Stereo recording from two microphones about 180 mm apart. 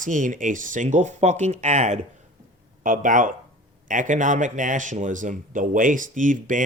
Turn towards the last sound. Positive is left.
turn(degrees=-45)  # may be behind; listen again after turning